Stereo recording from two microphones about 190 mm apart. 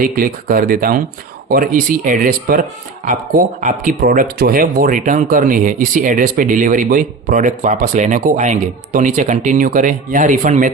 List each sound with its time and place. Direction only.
0.0 s speech: 50° right (ahead or behind)